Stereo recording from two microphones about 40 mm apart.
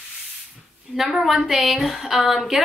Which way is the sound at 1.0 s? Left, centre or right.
Centre.